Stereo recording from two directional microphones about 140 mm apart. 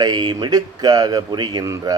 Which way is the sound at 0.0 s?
30° right (ahead or behind).